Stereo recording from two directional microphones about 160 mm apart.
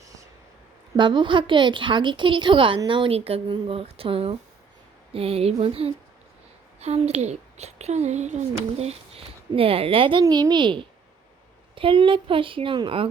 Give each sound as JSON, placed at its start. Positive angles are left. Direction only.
{"t": 0.9, "sound": "a woman's voice", "side_deg": -30}